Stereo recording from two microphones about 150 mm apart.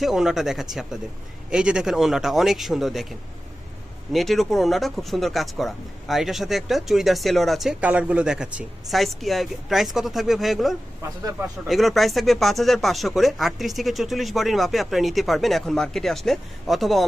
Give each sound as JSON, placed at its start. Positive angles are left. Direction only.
{"t": 0.0, "sound": "speech", "side_deg": -5}
{"t": 4.1, "sound": "speech", "side_deg": 0}
{"t": 11.0, "sound": "a man's voice", "side_deg": -20}
{"t": 11.7, "sound": "speech", "side_deg": 0}